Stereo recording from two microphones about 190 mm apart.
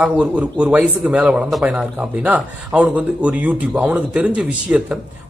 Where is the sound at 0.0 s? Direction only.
5° right (ahead or behind).